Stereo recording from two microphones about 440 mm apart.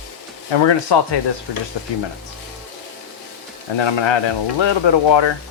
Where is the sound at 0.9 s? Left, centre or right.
Left.